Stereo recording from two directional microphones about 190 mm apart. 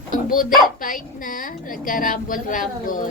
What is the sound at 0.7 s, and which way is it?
A woman's voice, 45° left (ahead or behind).